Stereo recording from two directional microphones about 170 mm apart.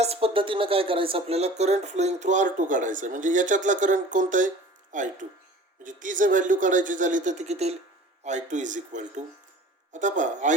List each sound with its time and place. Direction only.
0.0 s speech: 35° right (ahead or behind)